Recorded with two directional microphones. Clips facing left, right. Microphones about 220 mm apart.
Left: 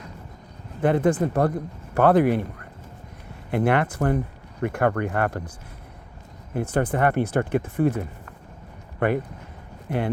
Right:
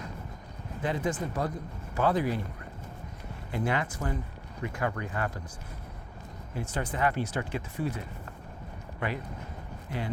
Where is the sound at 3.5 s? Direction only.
65° left (ahead or behind).